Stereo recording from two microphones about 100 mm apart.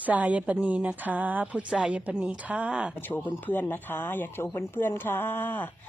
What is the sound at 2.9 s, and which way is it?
Speech, 20° left (ahead or behind).